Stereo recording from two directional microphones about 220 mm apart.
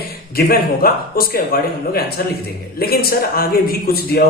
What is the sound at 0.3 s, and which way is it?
Speech, 45° left (ahead or behind).